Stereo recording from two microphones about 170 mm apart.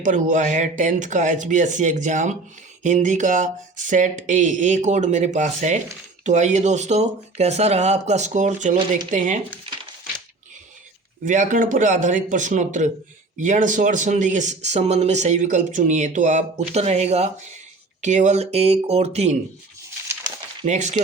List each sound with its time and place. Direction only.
0.0 s speech: 45° right (ahead or behind)
11.3 s speech: 50° right (ahead or behind)
20.7 s speech: 45° right (ahead or behind)